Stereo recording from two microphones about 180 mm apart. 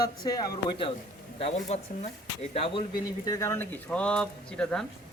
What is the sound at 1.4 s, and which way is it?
Speech, 35° left (ahead or behind).